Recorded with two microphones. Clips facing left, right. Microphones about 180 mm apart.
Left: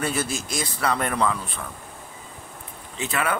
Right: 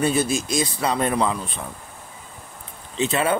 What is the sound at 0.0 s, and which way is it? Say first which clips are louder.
Speech: right 6 dB; 15° right (ahead or behind).